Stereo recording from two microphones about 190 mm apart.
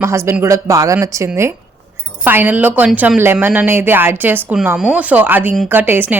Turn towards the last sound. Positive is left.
turn(degrees=-10)  # may be behind; listen again after turning